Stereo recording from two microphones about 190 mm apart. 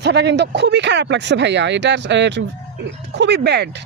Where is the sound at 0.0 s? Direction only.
65° right (ahead or behind).